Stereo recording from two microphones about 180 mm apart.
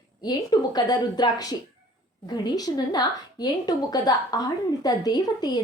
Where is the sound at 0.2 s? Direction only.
20° left (ahead or behind).